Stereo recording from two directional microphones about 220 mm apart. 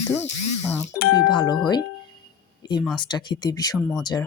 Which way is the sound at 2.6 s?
20° left (ahead or behind).